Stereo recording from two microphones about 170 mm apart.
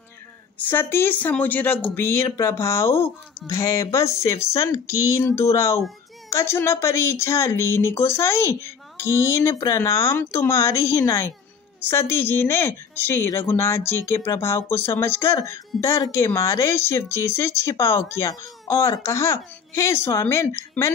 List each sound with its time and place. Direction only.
0.6 s speech: 10° left (ahead or behind)